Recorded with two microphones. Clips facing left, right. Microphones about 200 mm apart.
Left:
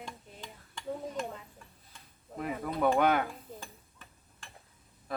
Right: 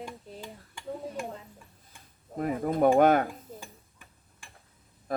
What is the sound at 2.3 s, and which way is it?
Speech, 45° right (ahead or behind).